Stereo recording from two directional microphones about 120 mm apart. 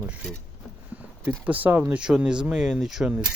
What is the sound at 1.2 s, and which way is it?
Speech, 15° right (ahead or behind).